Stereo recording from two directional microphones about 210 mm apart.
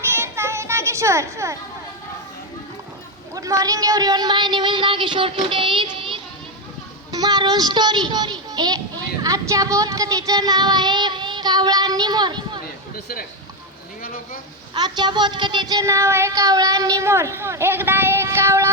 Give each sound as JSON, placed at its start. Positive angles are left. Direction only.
{"t": 0.0, "sound": "children playing", "side_deg": -10}
{"t": 3.3, "sound": "a woman's voice", "side_deg": -15}
{"t": 14.8, "sound": "speech", "side_deg": -20}